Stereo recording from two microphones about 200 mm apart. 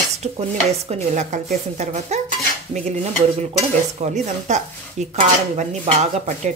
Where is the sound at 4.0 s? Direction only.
35° right (ahead or behind).